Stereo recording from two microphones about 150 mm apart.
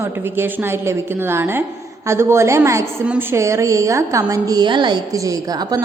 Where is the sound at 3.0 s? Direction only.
5° right (ahead or behind).